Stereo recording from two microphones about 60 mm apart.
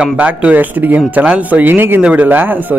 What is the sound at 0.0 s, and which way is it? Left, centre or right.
Speech, right.